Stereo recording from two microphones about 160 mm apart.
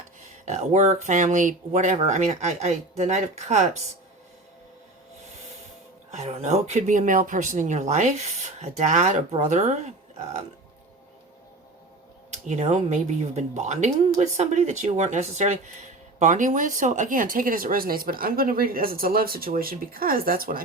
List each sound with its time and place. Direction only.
0.2 s speech: 45° right (ahead or behind)
6.1 s speech: 40° right (ahead or behind)
12.3 s speech: 45° right (ahead or behind); by 20.6 s 65° right (ahead or behind)